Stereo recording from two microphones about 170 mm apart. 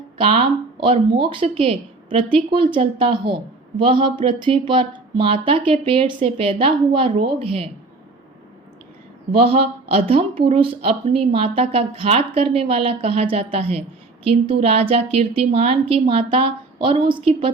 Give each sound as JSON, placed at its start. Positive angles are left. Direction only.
{"t": 0.2, "sound": "speech", "side_deg": -30}
{"t": 9.3, "sound": "speech", "side_deg": -35}